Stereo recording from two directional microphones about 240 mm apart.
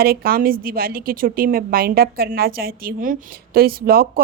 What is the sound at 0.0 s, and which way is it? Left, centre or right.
A woman's voice, right.